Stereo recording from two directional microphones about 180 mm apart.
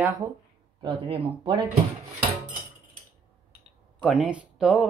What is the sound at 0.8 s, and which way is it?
Speech, 30° right (ahead or behind).